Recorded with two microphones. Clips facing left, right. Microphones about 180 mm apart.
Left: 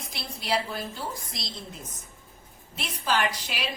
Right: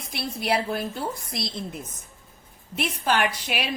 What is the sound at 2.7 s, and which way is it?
Speech, 60° right (ahead or behind).